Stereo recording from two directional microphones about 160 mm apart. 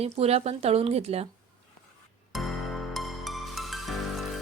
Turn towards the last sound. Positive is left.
turn(degrees=0)  # may be behind; listen again after turning